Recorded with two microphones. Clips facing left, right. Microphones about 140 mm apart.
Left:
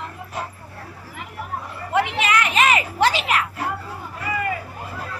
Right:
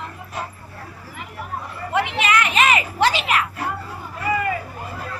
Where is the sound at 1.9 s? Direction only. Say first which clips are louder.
Even; 40° left (ahead or behind).